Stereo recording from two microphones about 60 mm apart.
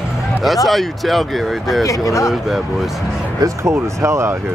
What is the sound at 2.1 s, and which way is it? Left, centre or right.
Speech, left.